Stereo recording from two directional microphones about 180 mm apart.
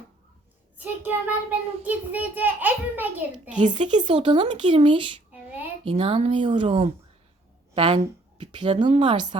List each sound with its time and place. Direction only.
0.8 s a child's voice: 10° right (ahead or behind)
3.5 s a woman's voice: 45° right (ahead or behind)
4.0 s speech: 30° right (ahead or behind)